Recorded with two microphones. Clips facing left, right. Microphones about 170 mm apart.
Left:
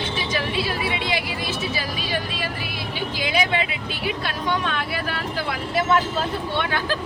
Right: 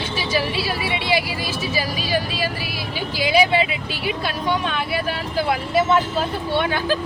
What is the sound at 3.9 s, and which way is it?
Speech, 25° left (ahead or behind).